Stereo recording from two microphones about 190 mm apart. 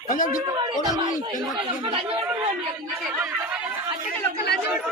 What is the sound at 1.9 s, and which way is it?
Chatter, 25° right (ahead or behind).